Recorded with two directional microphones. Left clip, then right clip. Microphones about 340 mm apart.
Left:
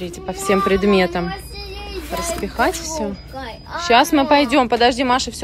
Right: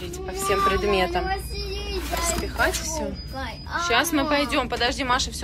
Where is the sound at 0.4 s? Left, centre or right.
Centre.